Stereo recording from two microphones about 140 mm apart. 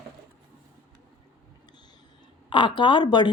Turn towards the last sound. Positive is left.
turn(degrees=30)  # may be behind; listen again after turning